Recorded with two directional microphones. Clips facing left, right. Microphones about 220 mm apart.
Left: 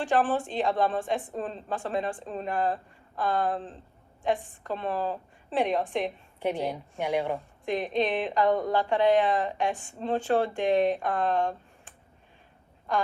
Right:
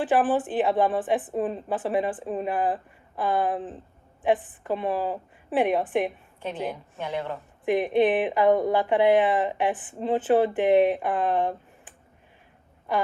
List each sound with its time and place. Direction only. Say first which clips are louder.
0.1 s speech: right 2 dB; 15° right (ahead or behind)
6.4 s a woman's voice: left 2 dB; 15° left (ahead or behind)
7.6 s speech: right 7 dB; 15° right (ahead or behind)